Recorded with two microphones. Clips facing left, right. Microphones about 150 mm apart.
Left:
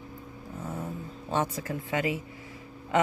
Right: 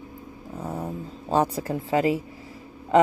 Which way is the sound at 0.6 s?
35° right (ahead or behind).